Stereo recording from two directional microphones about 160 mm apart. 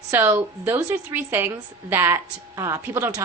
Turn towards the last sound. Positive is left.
turn(degrees=-15)  # may be behind; listen again after turning